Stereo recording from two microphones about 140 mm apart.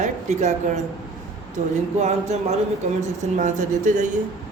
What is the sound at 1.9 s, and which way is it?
A woman's voice, 55° right (ahead or behind).